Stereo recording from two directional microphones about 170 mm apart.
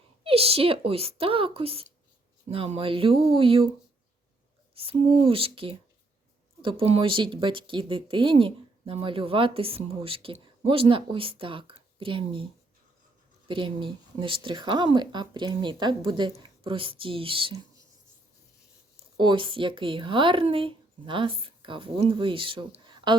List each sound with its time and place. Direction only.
0.3 s speech: 35° right (ahead or behind)
4.7 s speech: 35° right (ahead or behind)
13.5 s speech: 30° right (ahead or behind)
19.1 s speech: 25° right (ahead or behind)